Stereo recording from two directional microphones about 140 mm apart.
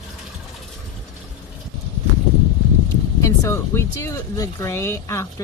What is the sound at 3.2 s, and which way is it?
Speech, 20° left (ahead or behind).